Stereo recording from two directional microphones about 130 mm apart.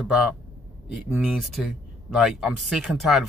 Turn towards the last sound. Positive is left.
turn(degrees=0)  # may be behind; listen again after turning